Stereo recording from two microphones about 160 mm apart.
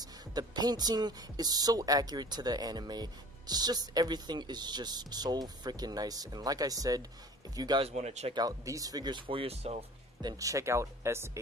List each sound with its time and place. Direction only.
0.0 s speech: 25° right (ahead or behind)
7.8 s speech: 45° right (ahead or behind)
8.4 s speech: 20° right (ahead or behind); by 9.8 s 40° right (ahead or behind)
10.2 s speech: 20° right (ahead or behind)